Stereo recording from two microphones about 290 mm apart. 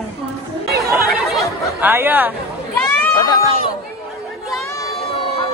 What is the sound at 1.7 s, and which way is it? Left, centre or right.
Speech, centre.